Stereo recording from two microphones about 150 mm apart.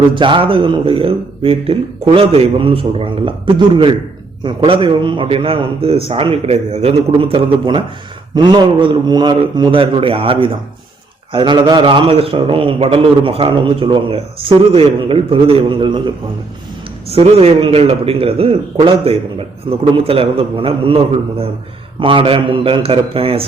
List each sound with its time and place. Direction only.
0.1 s a man's voice: 35° right (ahead or behind)
17.1 s a man's voice: 40° right (ahead or behind)